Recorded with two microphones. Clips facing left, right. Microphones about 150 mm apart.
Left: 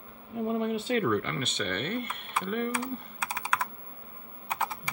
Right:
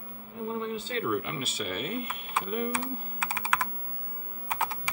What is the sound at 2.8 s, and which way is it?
Computer keyboard, 5° right (ahead or behind).